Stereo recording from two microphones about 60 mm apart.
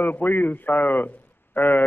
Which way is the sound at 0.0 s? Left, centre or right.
Left.